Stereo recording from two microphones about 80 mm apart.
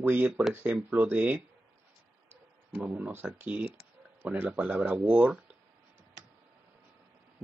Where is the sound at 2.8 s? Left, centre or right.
Centre.